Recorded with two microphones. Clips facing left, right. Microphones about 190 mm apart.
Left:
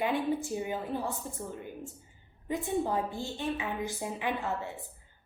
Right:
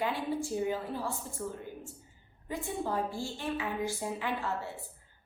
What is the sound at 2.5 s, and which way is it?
A woman's voice, 20° left (ahead or behind).